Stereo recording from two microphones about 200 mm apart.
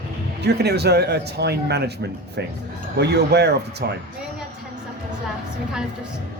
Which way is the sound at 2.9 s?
55° right (ahead or behind).